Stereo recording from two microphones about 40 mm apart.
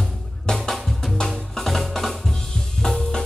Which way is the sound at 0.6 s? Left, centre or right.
Centre.